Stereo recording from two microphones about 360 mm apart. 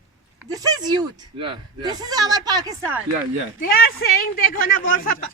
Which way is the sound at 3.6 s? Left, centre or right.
Left.